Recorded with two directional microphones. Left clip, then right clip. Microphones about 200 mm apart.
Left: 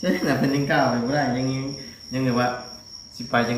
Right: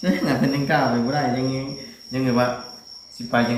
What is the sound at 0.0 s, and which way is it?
Speech, centre (ahead or behind).